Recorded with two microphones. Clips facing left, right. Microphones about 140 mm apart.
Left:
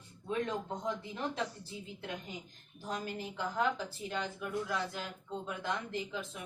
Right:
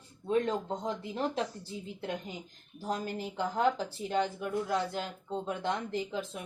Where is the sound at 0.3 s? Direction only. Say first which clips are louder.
Right 6 dB; 30° right (ahead or behind).